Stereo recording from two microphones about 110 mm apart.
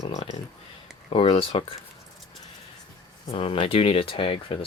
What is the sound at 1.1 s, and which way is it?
Speech, 60° left (ahead or behind).